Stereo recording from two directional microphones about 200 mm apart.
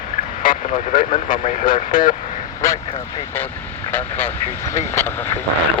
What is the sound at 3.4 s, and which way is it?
Speech, 10° left (ahead or behind).